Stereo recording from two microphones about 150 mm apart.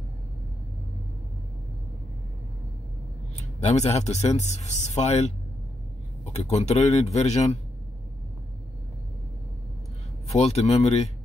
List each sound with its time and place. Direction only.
3.3 s speech: 50° left (ahead or behind)
10.2 s speech: 45° left (ahead or behind)